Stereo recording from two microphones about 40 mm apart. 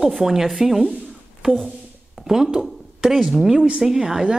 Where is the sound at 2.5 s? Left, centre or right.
Centre.